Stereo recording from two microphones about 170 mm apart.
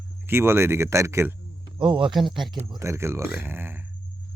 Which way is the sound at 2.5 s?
20° right (ahead or behind).